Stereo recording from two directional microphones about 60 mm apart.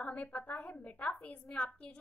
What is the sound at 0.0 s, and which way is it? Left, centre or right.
A woman's voice, left.